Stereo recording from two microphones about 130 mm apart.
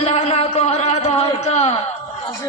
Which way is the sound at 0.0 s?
55° left (ahead or behind).